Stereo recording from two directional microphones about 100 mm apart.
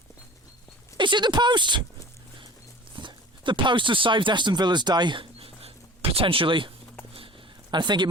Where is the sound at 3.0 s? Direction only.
50° right (ahead or behind).